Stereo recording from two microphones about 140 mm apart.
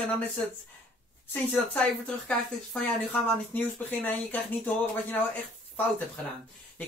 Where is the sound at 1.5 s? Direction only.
10° left (ahead or behind).